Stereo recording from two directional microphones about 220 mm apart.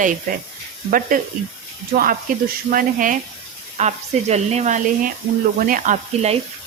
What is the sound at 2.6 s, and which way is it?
Speech, 40° right (ahead or behind).